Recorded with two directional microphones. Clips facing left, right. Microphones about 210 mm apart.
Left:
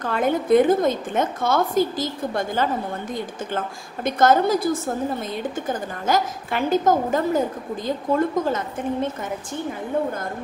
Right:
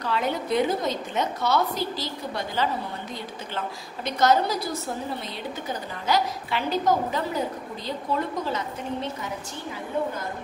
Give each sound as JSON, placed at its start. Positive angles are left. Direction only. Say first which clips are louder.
{"t": 0.0, "sound": "a woman's voice", "louder": "left 5 dB", "side_deg": 50}